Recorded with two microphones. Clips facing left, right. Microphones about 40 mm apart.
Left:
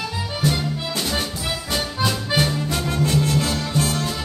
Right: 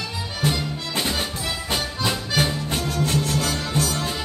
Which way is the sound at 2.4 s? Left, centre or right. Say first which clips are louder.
Even; right.